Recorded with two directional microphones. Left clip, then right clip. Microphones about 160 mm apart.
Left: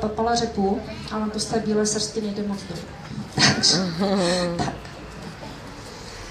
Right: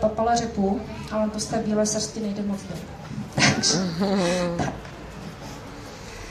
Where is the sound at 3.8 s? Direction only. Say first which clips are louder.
Left 2 dB; 5° left (ahead or behind).